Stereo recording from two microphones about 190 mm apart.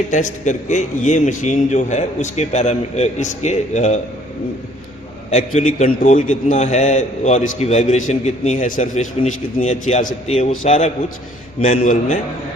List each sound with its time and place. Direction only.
0.1 s a man's voice: 40° left (ahead or behind)
5.3 s a man's voice: 40° left (ahead or behind)